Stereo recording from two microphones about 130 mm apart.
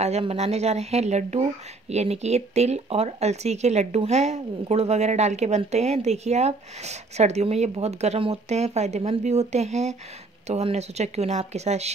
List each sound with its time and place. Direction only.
0.2 s a woman's voice: 50° right (ahead or behind)